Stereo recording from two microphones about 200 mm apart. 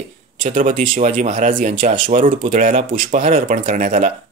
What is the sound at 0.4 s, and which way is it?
Speech, 40° right (ahead or behind).